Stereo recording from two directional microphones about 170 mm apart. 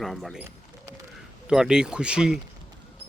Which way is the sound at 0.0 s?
Centre (ahead or behind).